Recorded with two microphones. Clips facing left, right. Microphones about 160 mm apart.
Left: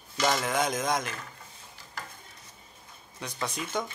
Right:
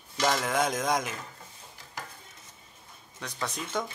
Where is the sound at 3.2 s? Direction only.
5° left (ahead or behind).